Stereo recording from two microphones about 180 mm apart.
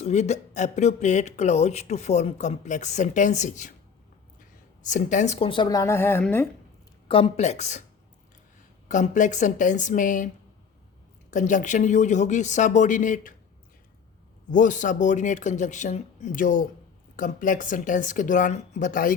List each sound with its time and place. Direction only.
0.0 s speech: 40° left (ahead or behind)
4.8 s speech: 45° left (ahead or behind); by 6.5 s 10° left (ahead or behind)
7.1 s speech: 35° left (ahead or behind)
8.9 s speech: 45° left (ahead or behind)
11.3 s speech: 45° left (ahead or behind)
14.5 s speech: 45° left (ahead or behind)